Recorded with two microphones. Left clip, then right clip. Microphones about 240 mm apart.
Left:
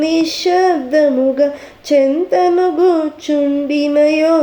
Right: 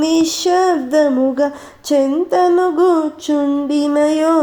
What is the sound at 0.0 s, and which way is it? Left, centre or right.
Speech, right.